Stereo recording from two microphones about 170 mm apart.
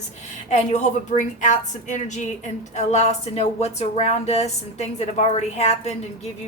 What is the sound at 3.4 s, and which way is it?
A woman's voice, 40° left (ahead or behind).